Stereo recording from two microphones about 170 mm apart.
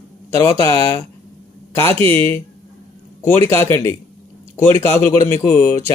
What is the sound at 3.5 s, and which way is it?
Speech, 15° left (ahead or behind).